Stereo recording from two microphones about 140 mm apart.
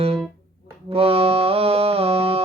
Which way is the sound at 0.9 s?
45° right (ahead or behind).